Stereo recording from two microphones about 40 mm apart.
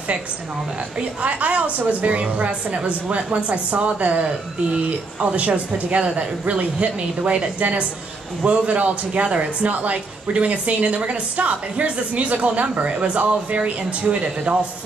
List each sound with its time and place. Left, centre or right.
1.2 s speech: right